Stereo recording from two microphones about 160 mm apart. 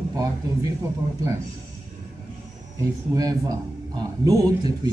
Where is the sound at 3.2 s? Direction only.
25° right (ahead or behind).